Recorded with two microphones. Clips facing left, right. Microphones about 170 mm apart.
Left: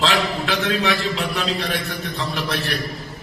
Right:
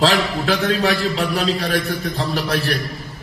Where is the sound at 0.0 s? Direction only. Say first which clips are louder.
Right 3 dB; 35° right (ahead or behind).